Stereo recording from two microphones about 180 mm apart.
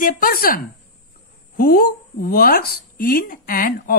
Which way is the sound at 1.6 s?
55° left (ahead or behind).